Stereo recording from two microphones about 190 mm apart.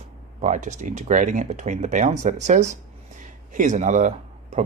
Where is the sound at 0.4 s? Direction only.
40° right (ahead or behind).